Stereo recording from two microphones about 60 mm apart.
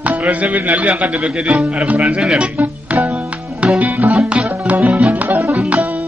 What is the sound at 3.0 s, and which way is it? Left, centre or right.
Music, centre.